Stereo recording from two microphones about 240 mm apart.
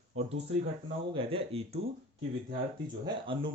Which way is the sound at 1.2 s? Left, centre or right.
Right.